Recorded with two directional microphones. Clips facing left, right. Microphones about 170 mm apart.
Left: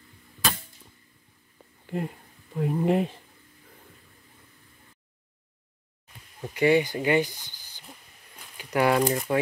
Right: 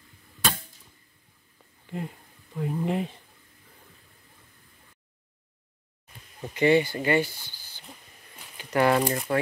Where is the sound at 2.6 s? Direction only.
60° left (ahead or behind).